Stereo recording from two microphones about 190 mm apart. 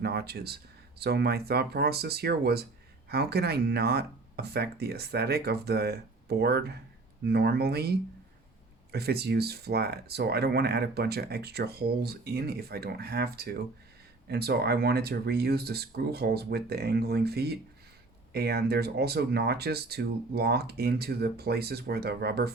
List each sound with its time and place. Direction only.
0.0 s speech: 55° right (ahead or behind)